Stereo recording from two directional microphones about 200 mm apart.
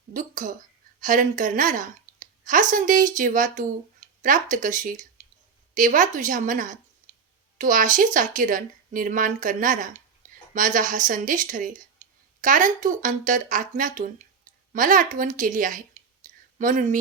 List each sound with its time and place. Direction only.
0.1 s a woman's voice: 40° right (ahead or behind)